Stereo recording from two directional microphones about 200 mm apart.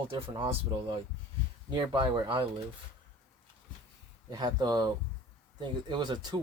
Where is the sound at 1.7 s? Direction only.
25° right (ahead or behind).